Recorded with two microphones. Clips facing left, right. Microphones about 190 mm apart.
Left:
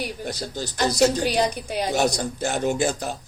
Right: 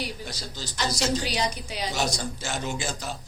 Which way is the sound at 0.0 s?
55° left (ahead or behind).